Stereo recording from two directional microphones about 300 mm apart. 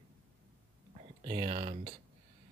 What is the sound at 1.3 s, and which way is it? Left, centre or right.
Speech, centre.